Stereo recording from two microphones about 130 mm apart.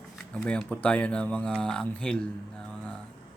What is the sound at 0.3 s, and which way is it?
Speech, 10° left (ahead or behind).